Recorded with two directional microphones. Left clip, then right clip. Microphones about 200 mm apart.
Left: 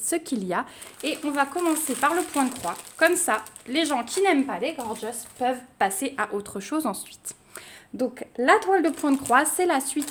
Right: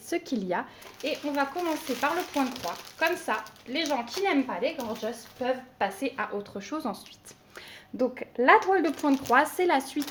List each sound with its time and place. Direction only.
0.1 s speech: 20° left (ahead or behind)
1.0 s speech: 55° left (ahead or behind); by 7.0 s 35° left (ahead or behind)
7.5 s speech: 25° left (ahead or behind)